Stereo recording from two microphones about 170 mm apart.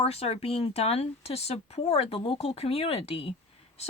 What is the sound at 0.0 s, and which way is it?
Speech, 35° left (ahead or behind).